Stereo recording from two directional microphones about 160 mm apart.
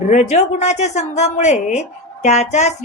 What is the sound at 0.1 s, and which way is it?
A woman's voice, 45° left (ahead or behind).